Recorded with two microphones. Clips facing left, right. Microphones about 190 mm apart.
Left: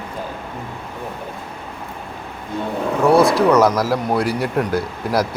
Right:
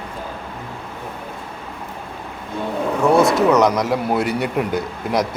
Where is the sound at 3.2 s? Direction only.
20° right (ahead or behind).